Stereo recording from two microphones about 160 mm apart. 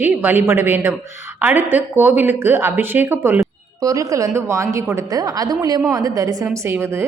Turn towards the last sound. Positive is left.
turn(degrees=-15)  # may be behind; listen again after turning